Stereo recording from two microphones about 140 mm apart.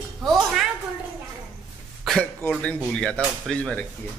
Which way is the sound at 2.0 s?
Centre (ahead or behind).